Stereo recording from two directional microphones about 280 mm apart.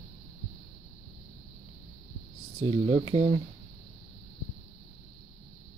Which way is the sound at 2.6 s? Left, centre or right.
Right.